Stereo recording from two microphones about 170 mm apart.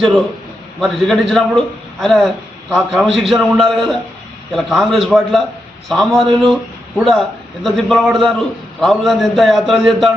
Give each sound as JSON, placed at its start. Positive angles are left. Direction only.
{"t": 0.8, "sound": "a man's voice", "side_deg": 0}